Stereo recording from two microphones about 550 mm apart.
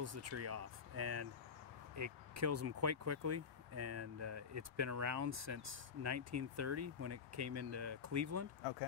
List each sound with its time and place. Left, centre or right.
0.0 s speech: right